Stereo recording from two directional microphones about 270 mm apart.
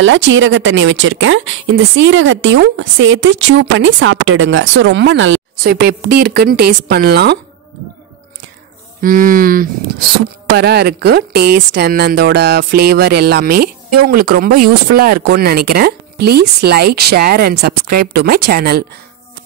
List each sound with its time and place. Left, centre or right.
0.0 s speech: right
9.0 s speech: right